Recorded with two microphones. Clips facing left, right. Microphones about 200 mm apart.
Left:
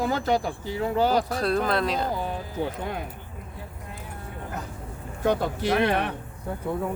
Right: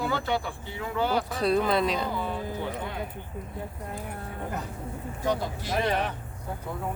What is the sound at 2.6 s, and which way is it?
Speech, 45° left (ahead or behind).